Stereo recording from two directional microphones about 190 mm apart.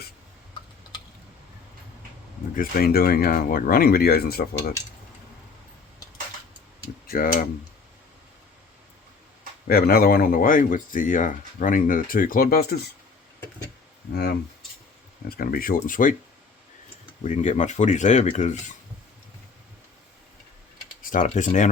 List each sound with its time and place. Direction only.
2.6 s speech: 50° left (ahead or behind)
7.1 s speech: 50° left (ahead or behind)
9.6 s speech: 55° left (ahead or behind)
14.1 s speech: 60° left (ahead or behind)
17.2 s speech: 40° left (ahead or behind)
21.0 s speech: 45° left (ahead or behind)